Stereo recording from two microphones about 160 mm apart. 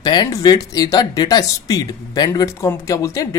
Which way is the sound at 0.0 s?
25° left (ahead or behind).